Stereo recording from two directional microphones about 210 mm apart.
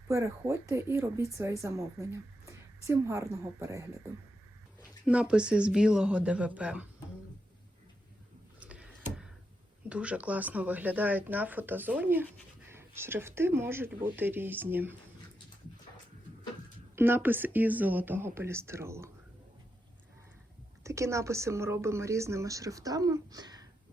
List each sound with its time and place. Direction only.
0.1 s a woman's voice: 15° right (ahead or behind)
5.0 s speech: 5° right (ahead or behind)
8.5 s a sound: 5° right (ahead or behind)
9.9 s speech: 5° right (ahead or behind)
16.9 s speech: 10° right (ahead or behind)
20.8 s speech: 15° right (ahead or behind)